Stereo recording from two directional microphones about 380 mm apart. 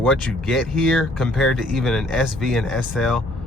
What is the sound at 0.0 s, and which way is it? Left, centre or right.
Speech, centre.